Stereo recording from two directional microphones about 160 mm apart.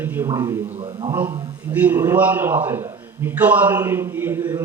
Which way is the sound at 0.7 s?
30° right (ahead or behind).